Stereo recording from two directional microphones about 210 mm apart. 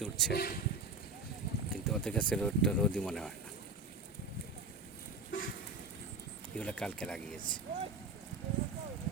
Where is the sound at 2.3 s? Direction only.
5° left (ahead or behind).